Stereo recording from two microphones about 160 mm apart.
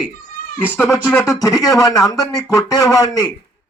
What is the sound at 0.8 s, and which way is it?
Speech, 15° left (ahead or behind).